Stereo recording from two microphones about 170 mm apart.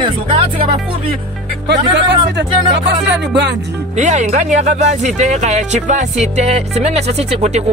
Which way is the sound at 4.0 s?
45° right (ahead or behind).